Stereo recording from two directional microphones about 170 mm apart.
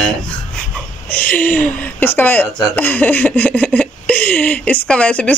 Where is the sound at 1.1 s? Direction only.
10° left (ahead or behind).